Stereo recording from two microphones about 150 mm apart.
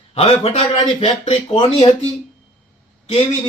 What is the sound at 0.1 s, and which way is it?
Speech, 40° left (ahead or behind).